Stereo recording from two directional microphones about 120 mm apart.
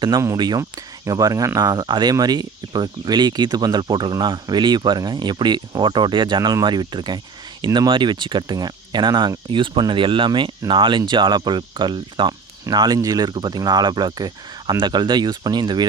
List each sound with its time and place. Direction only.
0.3 s speech: 35° right (ahead or behind)